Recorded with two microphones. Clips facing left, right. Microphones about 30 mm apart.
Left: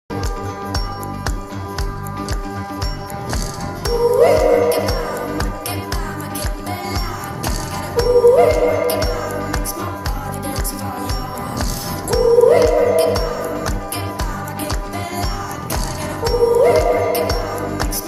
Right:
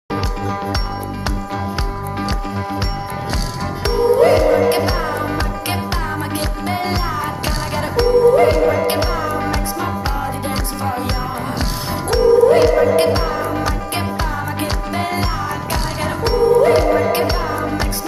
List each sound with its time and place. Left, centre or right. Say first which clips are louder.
2.1 s music: right 3 dB; right
3.8 s music: even; right
12.1 s music: even; right